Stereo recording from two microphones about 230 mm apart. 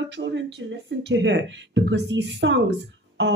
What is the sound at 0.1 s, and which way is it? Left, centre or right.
Speech, right.